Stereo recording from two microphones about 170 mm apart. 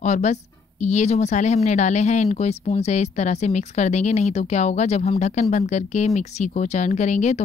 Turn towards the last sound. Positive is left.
turn(degrees=45)  # may be behind; listen again after turning